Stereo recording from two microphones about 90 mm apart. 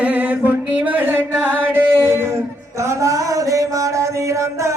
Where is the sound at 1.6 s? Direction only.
25° right (ahead or behind).